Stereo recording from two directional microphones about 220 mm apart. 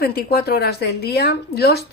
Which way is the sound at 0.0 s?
45° left (ahead or behind).